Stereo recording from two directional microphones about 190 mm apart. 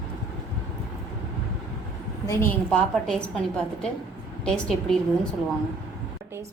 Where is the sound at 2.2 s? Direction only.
15° left (ahead or behind).